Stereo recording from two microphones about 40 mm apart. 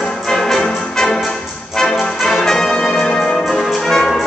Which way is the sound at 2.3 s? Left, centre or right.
Centre.